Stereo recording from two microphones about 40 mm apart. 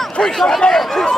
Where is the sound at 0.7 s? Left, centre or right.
Centre.